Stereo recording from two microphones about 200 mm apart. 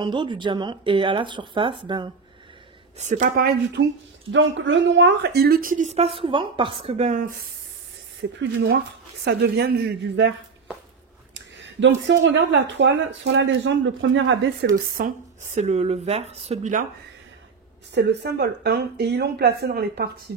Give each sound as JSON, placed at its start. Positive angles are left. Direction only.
{"t": 0.0, "sound": "speech", "side_deg": -25}
{"t": 3.0, "sound": "speech", "side_deg": -40}
{"t": 4.3, "sound": "speech", "side_deg": -65}
{"t": 8.2, "sound": "speech", "side_deg": -60}
{"t": 11.3, "sound": "speech", "side_deg": -65}
{"t": 15.0, "sound": "speech", "side_deg": -40}
{"t": 17.9, "sound": "speech", "side_deg": -55}